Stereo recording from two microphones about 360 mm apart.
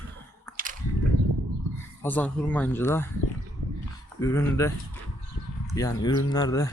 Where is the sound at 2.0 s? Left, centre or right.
Centre.